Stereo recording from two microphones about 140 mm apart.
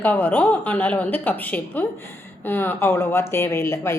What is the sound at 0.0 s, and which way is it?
A woman's voice, 10° left (ahead or behind).